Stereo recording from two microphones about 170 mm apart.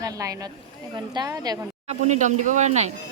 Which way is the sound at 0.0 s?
20° right (ahead or behind).